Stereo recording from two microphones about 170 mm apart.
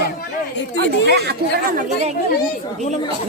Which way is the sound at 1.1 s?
70° right (ahead or behind).